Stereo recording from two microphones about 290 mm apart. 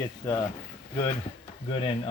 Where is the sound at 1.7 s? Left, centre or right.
Centre.